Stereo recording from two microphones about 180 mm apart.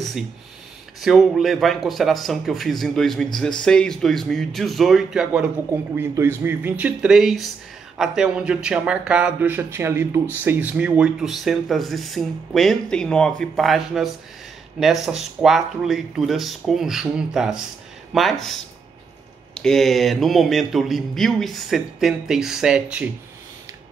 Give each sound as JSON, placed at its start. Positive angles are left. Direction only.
{"t": 1.0, "sound": "speech", "side_deg": 0}